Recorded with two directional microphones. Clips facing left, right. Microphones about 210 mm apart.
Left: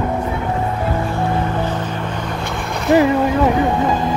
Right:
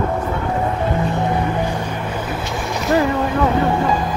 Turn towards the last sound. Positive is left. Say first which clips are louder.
# left 4 dB
turn(degrees=20)  # may be behind; listen again after turning